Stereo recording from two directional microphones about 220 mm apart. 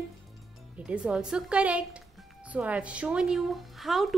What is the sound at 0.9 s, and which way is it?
Speech, 5° right (ahead or behind).